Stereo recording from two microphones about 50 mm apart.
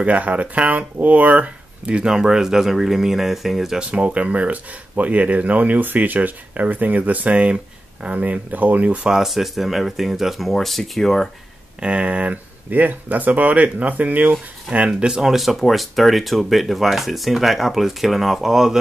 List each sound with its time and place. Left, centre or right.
0.0 s speech: right; by 3.8 s centre
3.9 s speech: right
9.1 s speech: centre
11.8 s speech: right
15.3 s speech: centre